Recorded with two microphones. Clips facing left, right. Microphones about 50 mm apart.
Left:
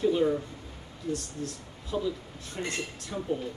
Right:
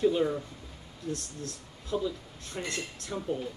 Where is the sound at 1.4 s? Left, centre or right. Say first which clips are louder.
Left 4 dB; left.